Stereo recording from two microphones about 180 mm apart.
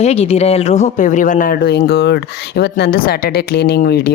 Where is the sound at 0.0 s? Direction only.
35° left (ahead or behind).